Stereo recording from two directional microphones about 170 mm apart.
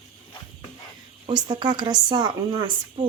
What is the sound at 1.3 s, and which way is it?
Speech, 25° right (ahead or behind).